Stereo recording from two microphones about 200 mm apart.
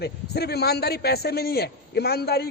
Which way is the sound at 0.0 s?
55° left (ahead or behind).